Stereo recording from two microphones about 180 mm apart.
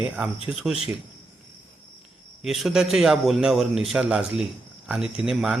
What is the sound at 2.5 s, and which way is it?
A man's voice, centre (ahead or behind).